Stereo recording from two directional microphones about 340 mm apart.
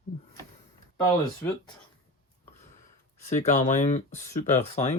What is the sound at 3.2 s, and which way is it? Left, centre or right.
Speech, left.